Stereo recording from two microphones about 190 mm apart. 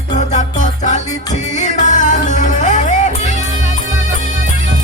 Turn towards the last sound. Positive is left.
turn(degrees=40)  # may be behind; listen again after turning